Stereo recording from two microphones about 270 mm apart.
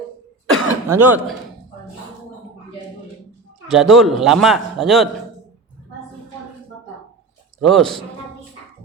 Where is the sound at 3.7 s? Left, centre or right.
Centre.